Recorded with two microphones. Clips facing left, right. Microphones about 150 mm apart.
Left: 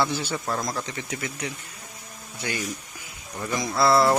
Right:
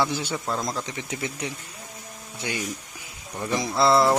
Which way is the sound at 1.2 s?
30° right (ahead or behind).